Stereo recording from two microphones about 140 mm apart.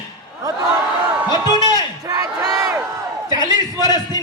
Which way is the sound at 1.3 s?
30° left (ahead or behind).